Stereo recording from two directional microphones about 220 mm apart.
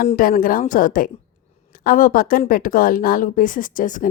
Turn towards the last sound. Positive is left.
turn(degrees=35)  # may be behind; listen again after turning